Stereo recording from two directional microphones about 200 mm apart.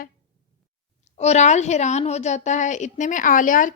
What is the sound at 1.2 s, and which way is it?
Speech, 35° left (ahead or behind).